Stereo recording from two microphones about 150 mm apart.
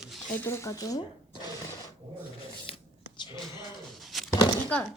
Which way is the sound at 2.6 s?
35° left (ahead or behind).